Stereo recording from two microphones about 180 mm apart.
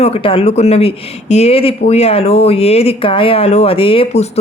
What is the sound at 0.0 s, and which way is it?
Speech, 30° left (ahead or behind).